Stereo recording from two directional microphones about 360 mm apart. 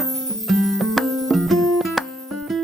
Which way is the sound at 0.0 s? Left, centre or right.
Centre.